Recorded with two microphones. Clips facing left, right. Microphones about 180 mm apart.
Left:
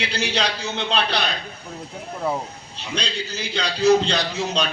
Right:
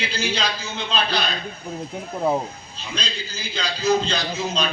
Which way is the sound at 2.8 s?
70° left (ahead or behind).